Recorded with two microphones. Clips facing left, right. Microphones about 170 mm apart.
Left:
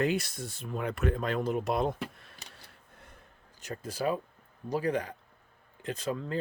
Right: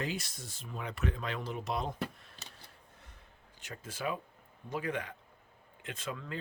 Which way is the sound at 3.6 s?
40° left (ahead or behind).